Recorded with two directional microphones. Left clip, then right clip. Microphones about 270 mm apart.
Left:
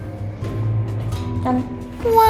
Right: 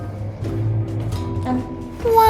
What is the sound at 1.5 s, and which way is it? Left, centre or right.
Music, centre.